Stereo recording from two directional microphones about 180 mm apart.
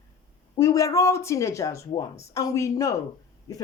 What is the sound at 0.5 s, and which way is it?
Speech, 20° left (ahead or behind).